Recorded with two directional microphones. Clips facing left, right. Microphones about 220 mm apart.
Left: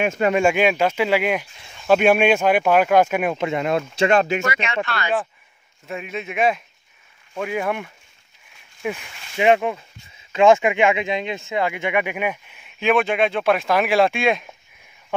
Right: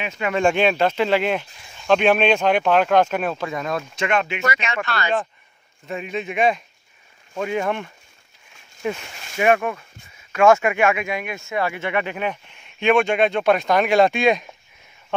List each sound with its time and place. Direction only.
0.0 s speech: 50° left (ahead or behind)
0.3 s speech: 10° left (ahead or behind)
3.3 s speech: 25° left (ahead or behind)
4.5 s speech: 40° right (ahead or behind)
5.9 s a man's voice: 5° left (ahead or behind)
9.4 s speech: 20° left (ahead or behind); by 14.5 s centre (ahead or behind)